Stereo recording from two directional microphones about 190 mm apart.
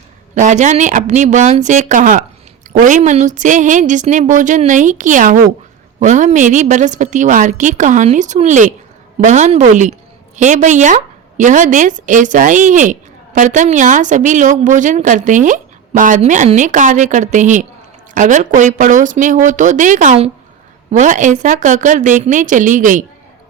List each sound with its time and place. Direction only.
0.3 s a woman's voice: 40° right (ahead or behind)